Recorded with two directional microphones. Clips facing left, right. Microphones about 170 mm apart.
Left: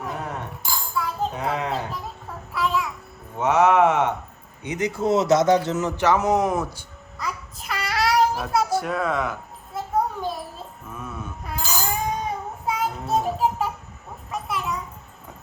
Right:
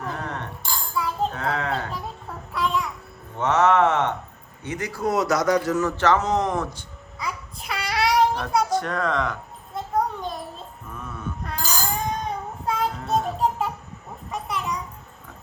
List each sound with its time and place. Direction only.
0.0 s a sound: 5° left (ahead or behind)
1.3 s speech: 15° left (ahead or behind)
2.5 s babbling: 5° left (ahead or behind)
3.3 s a sound: 10° left (ahead or behind)
4.6 s a man's voice: 20° left (ahead or behind)
7.3 s child singing: centre (ahead or behind)
10.8 s a sound: 5° left (ahead or behind)
12.0 s child singing: 5° left (ahead or behind)
14.3 s children playing: centre (ahead or behind)